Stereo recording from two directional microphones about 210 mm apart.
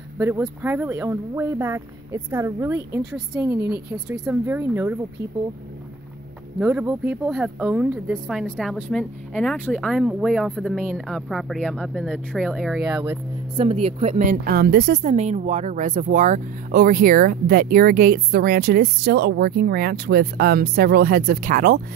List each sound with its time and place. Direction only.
0.2 s speech: 10° right (ahead or behind)
6.6 s speech: 10° right (ahead or behind)
13.6 s speech: 30° right (ahead or behind); by 15.0 s 50° right (ahead or behind)
15.0 s speech: 30° right (ahead or behind)